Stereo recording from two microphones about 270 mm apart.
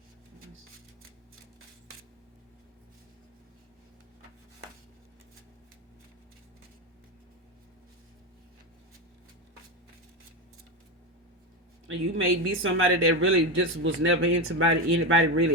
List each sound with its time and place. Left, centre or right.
11.9 s speech: right